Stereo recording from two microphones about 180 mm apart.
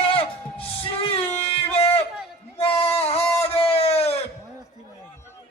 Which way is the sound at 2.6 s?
35° left (ahead or behind).